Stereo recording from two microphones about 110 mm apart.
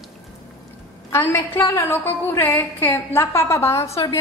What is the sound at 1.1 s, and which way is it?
A woman's voice, 20° left (ahead or behind).